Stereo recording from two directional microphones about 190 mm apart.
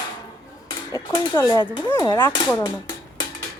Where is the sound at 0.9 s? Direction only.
20° left (ahead or behind).